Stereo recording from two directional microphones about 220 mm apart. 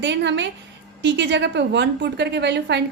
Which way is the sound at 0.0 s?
55° right (ahead or behind).